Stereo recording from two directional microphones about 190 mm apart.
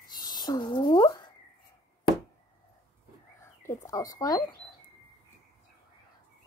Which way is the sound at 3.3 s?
15° left (ahead or behind).